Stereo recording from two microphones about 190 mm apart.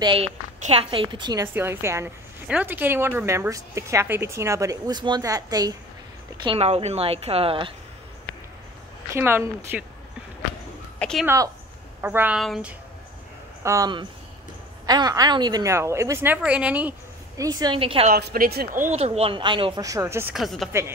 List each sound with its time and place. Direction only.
0.0 s a woman's voice: 30° right (ahead or behind)
6.4 s speech: 30° right (ahead or behind)
9.1 s a woman's voice: 15° right (ahead or behind)
11.0 s a sound: 5° left (ahead or behind)
11.2 s a woman's voice: 15° right (ahead or behind); by 12.7 s centre (ahead or behind)
13.6 s a woman's voice: 15° right (ahead or behind)
17.4 s speech: 20° right (ahead or behind)
18.1 s speech: 50° right (ahead or behind)
18.9 s speech: 35° right (ahead or behind); by 20.2 s 15° right (ahead or behind)
20.3 s speech: centre (ahead or behind)